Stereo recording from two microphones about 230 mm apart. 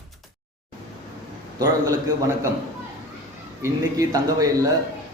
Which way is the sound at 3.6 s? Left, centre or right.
Centre.